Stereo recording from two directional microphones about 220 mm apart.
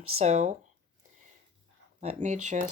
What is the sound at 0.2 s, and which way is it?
Speech, 30° right (ahead or behind).